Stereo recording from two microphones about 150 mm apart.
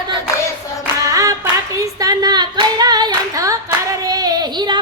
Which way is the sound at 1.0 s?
20° right (ahead or behind).